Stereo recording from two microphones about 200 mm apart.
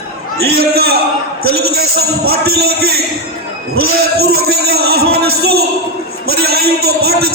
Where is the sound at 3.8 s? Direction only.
50° right (ahead or behind).